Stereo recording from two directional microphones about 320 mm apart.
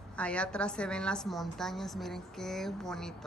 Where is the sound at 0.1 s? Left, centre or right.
Centre.